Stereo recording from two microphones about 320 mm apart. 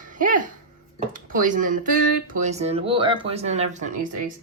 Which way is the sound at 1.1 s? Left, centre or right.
Right.